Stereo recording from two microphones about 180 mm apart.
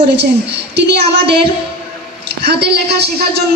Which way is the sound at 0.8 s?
65° right (ahead or behind).